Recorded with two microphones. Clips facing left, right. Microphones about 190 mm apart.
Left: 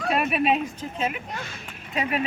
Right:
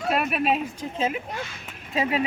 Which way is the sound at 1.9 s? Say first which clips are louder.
Right 2 dB; 25° right (ahead or behind).